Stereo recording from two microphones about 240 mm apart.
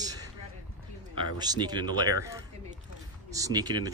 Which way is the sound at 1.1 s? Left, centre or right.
Centre.